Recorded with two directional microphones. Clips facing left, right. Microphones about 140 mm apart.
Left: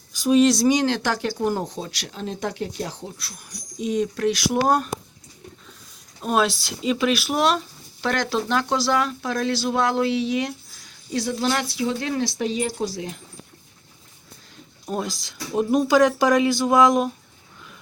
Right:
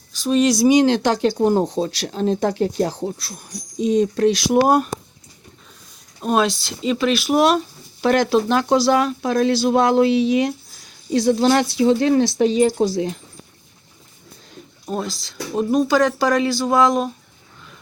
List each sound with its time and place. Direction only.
0.2 s speech: 5° left (ahead or behind); by 4.9 s 10° right (ahead or behind)
6.2 s speech: 5° left (ahead or behind)
7.3 s speech: 10° right (ahead or behind); by 13.1 s 30° right (ahead or behind)
15.0 s speech: 15° left (ahead or behind)